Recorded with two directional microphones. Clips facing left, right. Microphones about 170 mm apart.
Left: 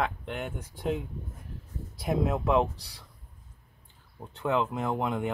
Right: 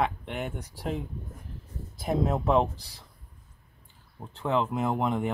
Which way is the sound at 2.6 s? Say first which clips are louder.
Even; centre (ahead or behind).